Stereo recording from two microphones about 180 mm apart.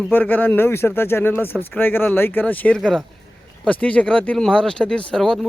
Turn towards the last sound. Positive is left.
turn(degrees=5)  # may be behind; listen again after turning